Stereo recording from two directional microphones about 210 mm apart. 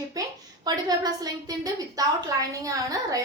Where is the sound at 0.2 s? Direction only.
20° right (ahead or behind).